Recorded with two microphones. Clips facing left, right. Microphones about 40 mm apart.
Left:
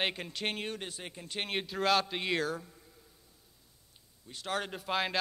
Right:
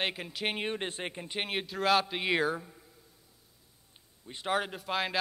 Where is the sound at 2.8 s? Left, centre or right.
Centre.